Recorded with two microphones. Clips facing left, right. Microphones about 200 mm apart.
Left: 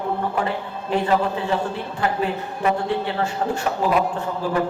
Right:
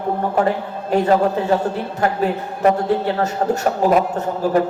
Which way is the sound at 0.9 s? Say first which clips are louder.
Right 5 dB; 40° right (ahead or behind).